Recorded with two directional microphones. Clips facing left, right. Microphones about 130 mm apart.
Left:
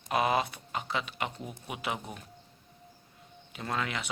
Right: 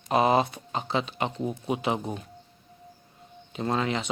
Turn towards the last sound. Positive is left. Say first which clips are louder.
# right 7 dB
turn(degrees=-25)  # may be behind; listen again after turning